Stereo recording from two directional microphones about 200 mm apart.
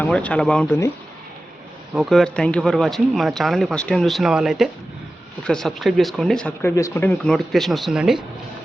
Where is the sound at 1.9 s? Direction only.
Centre (ahead or behind).